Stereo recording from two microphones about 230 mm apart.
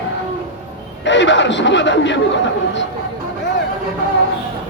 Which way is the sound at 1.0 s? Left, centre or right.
Left.